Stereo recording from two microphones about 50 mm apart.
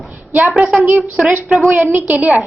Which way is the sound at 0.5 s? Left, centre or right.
Right.